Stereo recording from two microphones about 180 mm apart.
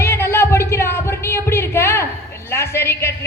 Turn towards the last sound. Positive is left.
turn(degrees=15)  # may be behind; listen again after turning